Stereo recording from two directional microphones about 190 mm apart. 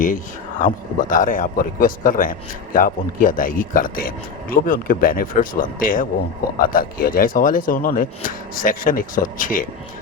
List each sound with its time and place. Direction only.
0.6 s speech: 45° left (ahead or behind)